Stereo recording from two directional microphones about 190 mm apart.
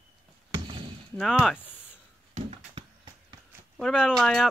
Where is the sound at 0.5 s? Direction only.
30° right (ahead or behind).